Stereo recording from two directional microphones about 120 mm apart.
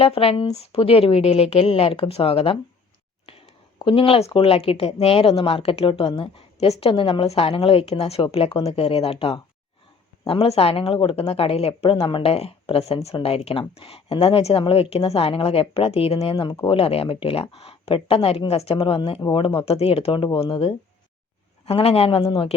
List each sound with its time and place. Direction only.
0.0 s speech: 50° left (ahead or behind)
19.2 s a man's voice: 35° left (ahead or behind); by 22.3 s 55° left (ahead or behind)